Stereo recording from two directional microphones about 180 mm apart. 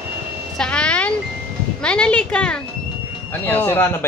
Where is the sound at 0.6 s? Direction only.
5° left (ahead or behind).